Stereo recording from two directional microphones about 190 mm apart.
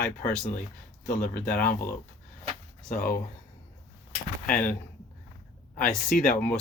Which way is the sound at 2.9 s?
50° left (ahead or behind).